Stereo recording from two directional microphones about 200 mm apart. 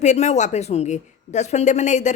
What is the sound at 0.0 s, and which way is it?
A woman's voice, 35° left (ahead or behind).